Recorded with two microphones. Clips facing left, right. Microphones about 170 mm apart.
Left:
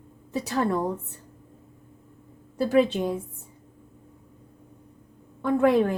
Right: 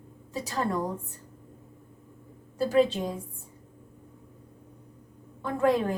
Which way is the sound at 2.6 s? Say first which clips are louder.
Left 2 dB; 65° left (ahead or behind).